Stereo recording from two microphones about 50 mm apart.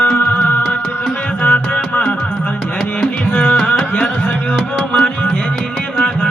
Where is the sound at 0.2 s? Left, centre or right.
Left.